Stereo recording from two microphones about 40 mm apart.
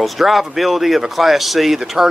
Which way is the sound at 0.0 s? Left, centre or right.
Centre.